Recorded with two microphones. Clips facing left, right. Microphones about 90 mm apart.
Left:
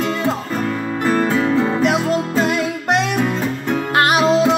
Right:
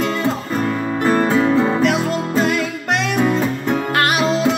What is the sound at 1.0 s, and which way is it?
Music, 10° right (ahead or behind).